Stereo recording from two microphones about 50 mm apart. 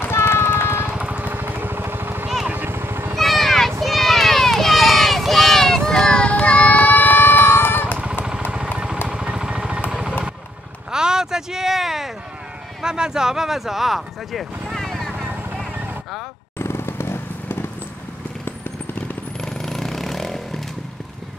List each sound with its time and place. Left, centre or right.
0.0 s vehicle: left
0.8 s vehicle: centre
1.1 s vehicle: right
3.2 s a sound: centre
3.8 s run: centre; by 8.0 s left
9.1 s vehicle: centre
10.9 s a sound: centre
12.8 s speech: centre
14.7 s vehicle: centre
16.5 s vehicle: left
19.4 s a sound: centre